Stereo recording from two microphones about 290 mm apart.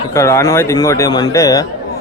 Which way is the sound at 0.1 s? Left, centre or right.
Centre.